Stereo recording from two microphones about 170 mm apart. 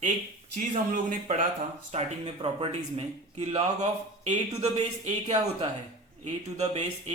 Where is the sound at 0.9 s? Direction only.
50° right (ahead or behind).